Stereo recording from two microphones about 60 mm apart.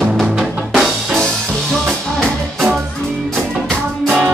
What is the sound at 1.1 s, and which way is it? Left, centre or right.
Music, centre.